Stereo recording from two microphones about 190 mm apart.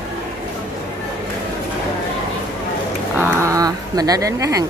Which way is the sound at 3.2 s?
15° right (ahead or behind).